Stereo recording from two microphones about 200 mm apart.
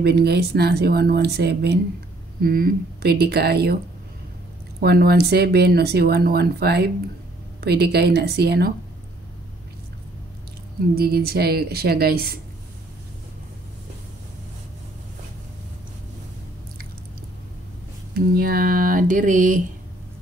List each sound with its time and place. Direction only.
0.0 s speech: 55° right (ahead or behind)
4.8 s speech: 50° right (ahead or behind)
11.0 s speech: 50° right (ahead or behind)
18.1 s speech: 50° right (ahead or behind)